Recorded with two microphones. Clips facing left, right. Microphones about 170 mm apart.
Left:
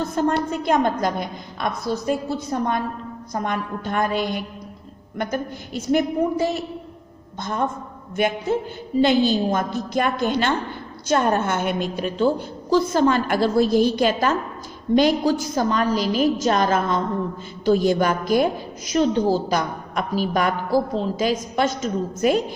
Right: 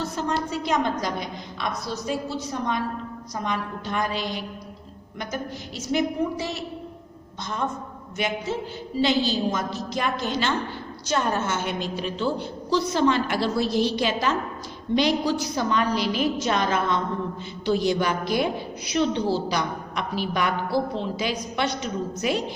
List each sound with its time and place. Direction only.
0.0 s a woman's voice: 55° left (ahead or behind)
8.1 s a woman's voice: 55° left (ahead or behind)